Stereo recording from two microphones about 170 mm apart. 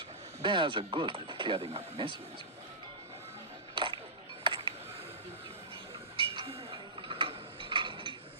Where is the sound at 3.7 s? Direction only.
30° right (ahead or behind).